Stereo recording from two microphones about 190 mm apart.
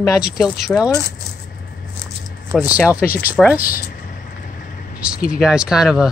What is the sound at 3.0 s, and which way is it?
Speech, 50° left (ahead or behind).